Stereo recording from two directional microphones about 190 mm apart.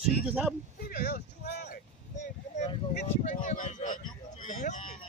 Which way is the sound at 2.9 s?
45° left (ahead or behind).